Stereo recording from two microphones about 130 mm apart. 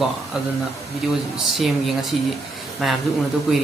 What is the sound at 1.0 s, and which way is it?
Speech, 5° right (ahead or behind).